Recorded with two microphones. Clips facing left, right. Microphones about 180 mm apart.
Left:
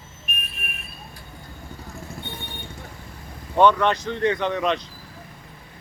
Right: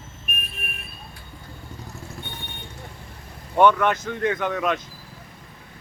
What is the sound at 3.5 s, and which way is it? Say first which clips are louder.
A man's voice: even; 10° right (ahead or behind).